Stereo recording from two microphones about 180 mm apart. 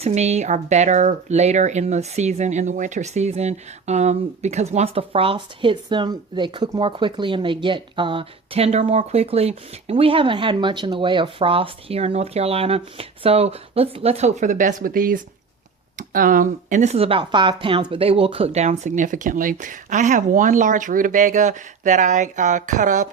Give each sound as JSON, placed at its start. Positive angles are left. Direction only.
{"t": 0.0, "sound": "speech", "side_deg": -35}